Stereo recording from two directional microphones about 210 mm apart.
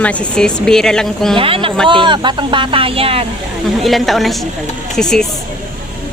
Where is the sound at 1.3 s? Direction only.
25° right (ahead or behind).